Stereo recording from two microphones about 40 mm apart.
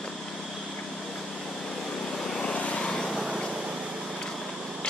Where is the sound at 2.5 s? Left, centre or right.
Left.